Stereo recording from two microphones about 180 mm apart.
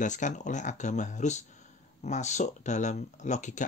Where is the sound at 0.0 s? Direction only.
45° left (ahead or behind).